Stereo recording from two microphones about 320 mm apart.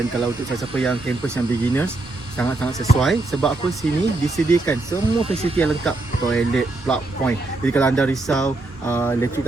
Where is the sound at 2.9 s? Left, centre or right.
Centre.